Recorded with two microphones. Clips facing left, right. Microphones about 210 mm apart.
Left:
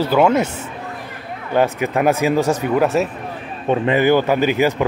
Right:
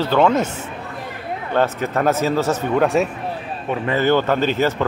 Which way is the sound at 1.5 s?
10° left (ahead or behind).